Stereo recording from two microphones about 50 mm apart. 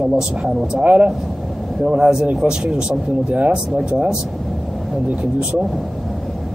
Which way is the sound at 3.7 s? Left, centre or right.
Centre.